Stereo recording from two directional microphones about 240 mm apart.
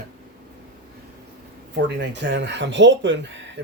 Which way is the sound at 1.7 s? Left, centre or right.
Right.